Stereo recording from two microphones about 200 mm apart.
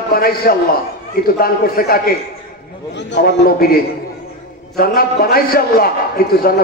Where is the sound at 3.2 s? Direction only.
55° left (ahead or behind).